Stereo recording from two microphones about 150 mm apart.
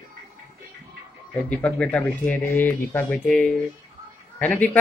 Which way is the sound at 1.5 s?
10° left (ahead or behind).